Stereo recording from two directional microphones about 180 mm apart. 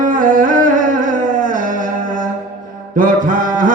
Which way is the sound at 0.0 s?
50° right (ahead or behind).